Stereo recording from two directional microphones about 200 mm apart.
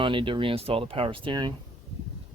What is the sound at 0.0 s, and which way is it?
Speech, 25° right (ahead or behind).